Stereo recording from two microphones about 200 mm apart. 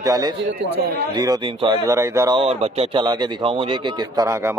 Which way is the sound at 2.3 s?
30° right (ahead or behind).